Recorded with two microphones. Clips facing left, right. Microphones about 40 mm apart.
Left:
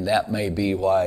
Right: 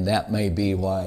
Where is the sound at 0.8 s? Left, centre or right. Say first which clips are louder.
Left 6 dB; left.